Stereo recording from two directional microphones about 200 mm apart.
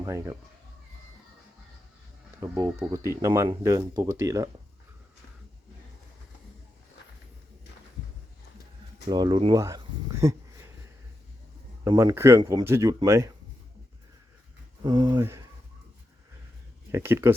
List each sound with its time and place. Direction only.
0.0 s speech: 15° right (ahead or behind)
2.4 s speech: 15° right (ahead or behind)
9.0 s speech: 20° right (ahead or behind)
11.9 s speech: 15° right (ahead or behind)
14.8 s speech: 20° right (ahead or behind)
16.9 s speech: 10° right (ahead or behind)